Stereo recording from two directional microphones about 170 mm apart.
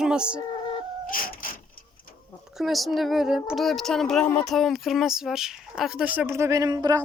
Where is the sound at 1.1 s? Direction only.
55° left (ahead or behind).